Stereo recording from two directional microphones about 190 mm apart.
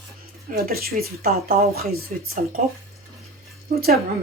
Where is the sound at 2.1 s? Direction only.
40° right (ahead or behind).